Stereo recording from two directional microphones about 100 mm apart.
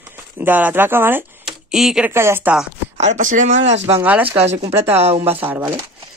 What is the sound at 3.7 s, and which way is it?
Speech, 90° right.